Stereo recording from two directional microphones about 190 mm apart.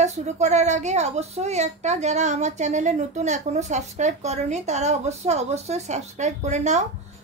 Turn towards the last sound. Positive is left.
turn(degrees=-40)  # may be behind; listen again after turning